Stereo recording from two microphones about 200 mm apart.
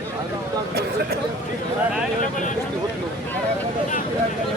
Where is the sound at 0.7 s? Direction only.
55° right (ahead or behind).